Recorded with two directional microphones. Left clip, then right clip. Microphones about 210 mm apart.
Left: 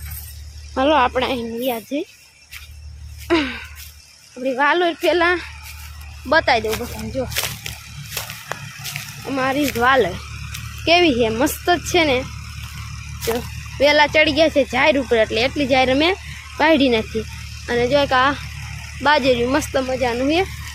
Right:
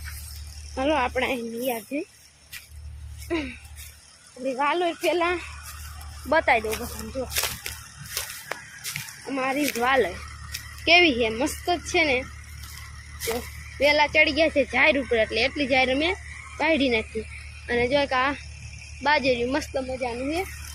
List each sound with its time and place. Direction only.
0.8 s a child's voice: 25° left (ahead or behind)
3.2 s music: 30° left (ahead or behind)
4.5 s a child's voice: 25° left (ahead or behind)
6.2 s speech: 15° left (ahead or behind)
8.4 s a sound: 20° left (ahead or behind)
10.8 s a child's voice: 15° left (ahead or behind); by 20.4 s 35° left (ahead or behind)